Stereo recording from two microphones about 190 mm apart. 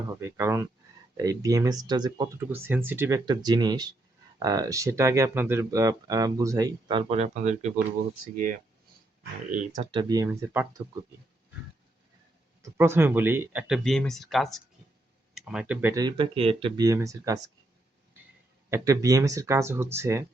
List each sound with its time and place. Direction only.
0.2 s speech: 15° right (ahead or behind); by 7.7 s 35° right (ahead or behind)
9.5 s speech: 45° right (ahead or behind)
9.9 s speech: 20° right (ahead or behind)
12.6 s speech: 15° right (ahead or behind)
18.7 s speech: 15° right (ahead or behind)